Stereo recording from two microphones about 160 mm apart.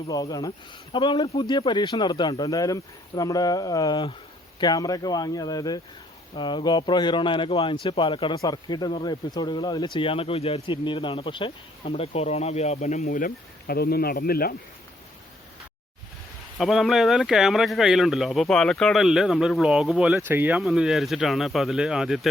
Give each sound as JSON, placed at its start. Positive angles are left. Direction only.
{"t": 0.1, "sound": "speech", "side_deg": 25}
{"t": 13.1, "sound": "speech", "side_deg": 65}
{"t": 16.6, "sound": "speech", "side_deg": 0}
{"t": 20.1, "sound": "speech", "side_deg": -15}
{"t": 20.6, "sound": "speech", "side_deg": 0}